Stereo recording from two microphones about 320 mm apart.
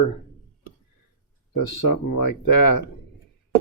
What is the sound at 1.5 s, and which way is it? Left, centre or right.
Speech, left.